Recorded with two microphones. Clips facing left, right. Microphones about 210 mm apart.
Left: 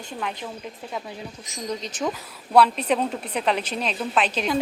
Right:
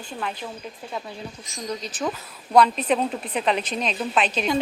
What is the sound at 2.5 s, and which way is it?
Speech, 10° left (ahead or behind).